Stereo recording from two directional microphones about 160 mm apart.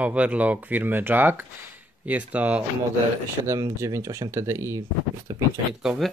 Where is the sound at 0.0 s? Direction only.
10° right (ahead or behind).